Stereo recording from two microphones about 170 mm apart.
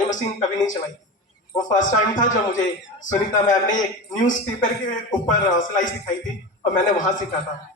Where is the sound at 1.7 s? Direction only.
50° left (ahead or behind).